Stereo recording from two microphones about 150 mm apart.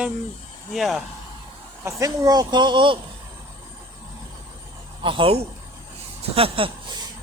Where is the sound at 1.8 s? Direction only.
20° right (ahead or behind).